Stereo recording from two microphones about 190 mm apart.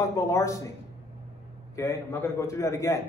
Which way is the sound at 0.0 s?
15° left (ahead or behind).